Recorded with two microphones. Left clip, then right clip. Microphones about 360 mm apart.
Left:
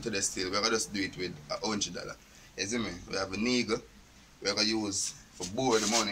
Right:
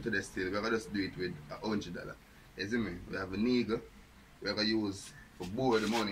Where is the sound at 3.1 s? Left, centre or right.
Centre.